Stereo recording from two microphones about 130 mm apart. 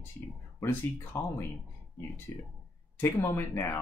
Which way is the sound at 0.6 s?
15° left (ahead or behind).